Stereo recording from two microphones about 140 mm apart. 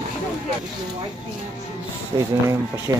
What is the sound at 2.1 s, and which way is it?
Speech, 30° right (ahead or behind).